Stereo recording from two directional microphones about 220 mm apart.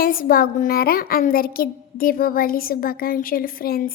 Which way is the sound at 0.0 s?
40° left (ahead or behind).